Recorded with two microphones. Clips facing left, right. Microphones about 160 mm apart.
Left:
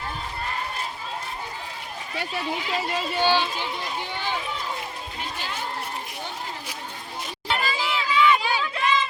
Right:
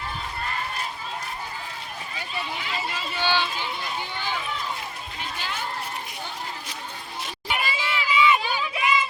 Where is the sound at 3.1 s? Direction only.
45° left (ahead or behind).